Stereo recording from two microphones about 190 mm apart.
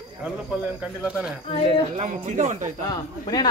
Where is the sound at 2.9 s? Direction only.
20° left (ahead or behind).